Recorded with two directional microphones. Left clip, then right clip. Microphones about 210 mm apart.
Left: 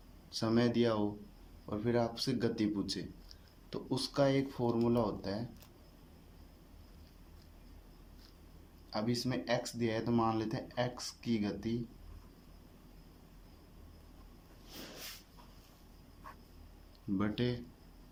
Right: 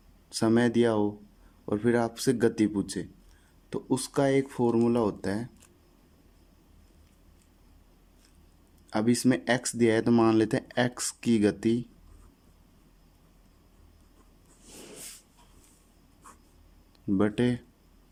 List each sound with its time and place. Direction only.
0.3 s speech: 40° right (ahead or behind)
8.9 s speech: 50° right (ahead or behind)
17.2 s speech: 40° right (ahead or behind)